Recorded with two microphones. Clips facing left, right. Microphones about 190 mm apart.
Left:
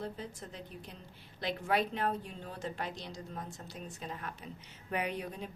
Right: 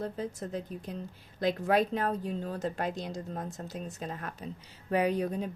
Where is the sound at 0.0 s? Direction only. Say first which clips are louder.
Right 6 dB; 45° right (ahead or behind).